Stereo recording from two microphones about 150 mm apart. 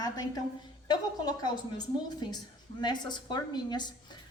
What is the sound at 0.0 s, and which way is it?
A woman's voice, 25° left (ahead or behind).